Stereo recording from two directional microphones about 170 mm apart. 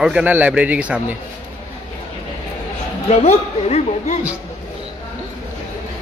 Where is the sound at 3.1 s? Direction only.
40° left (ahead or behind).